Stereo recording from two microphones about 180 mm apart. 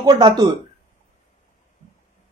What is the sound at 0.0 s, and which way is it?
Speech, 25° right (ahead or behind).